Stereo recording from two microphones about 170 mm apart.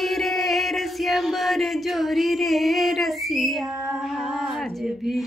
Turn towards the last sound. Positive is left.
turn(degrees=0)  # may be behind; listen again after turning